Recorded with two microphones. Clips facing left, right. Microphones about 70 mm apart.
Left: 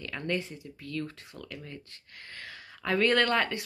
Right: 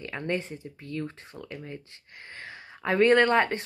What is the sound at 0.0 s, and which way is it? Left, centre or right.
Speech, right.